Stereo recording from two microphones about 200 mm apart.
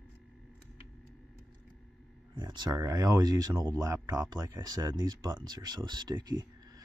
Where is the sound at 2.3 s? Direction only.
20° right (ahead or behind).